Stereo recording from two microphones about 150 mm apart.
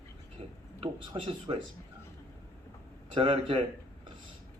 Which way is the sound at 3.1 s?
35° right (ahead or behind).